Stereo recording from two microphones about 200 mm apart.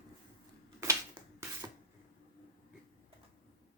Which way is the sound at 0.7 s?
15° right (ahead or behind).